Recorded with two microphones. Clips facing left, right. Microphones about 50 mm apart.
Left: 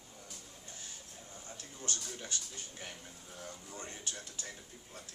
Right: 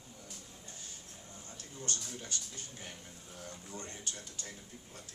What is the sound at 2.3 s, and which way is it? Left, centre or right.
Speech, left.